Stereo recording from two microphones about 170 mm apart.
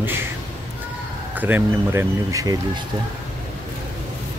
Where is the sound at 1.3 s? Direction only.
10° right (ahead or behind).